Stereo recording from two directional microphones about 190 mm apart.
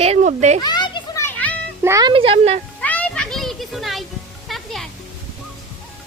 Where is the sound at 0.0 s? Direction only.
35° right (ahead or behind).